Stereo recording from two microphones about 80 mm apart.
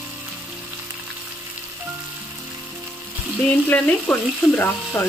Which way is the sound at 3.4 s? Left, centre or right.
Left.